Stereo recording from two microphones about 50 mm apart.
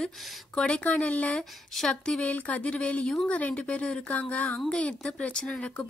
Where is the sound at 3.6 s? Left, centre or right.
Centre.